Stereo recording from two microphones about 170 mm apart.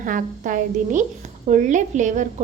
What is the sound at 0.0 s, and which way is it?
A woman's voice, 50° right (ahead or behind).